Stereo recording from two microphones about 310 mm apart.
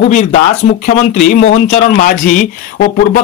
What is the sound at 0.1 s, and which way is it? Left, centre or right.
Speech, left.